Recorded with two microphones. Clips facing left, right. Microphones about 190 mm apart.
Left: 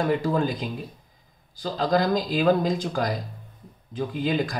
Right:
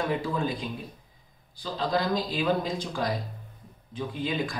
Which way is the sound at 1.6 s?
45° left (ahead or behind).